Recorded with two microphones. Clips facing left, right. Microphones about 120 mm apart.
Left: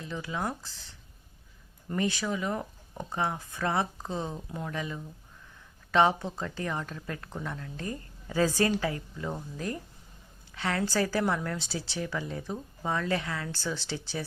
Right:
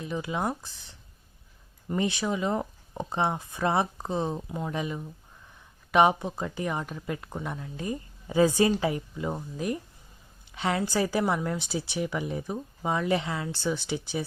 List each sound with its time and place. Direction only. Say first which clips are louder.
0.0 s speech: right 4 dB; 20° right (ahead or behind)